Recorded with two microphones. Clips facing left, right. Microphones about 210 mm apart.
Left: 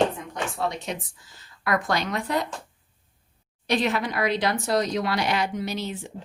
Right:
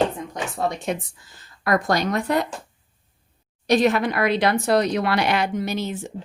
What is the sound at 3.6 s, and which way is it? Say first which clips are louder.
Speech: right 6 dB; 45° right (ahead or behind).